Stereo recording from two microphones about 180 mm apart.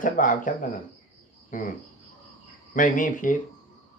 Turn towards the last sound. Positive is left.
turn(degrees=50)  # may be behind; listen again after turning